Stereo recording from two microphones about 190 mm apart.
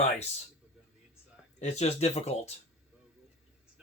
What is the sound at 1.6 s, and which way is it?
Speech, 35° left (ahead or behind).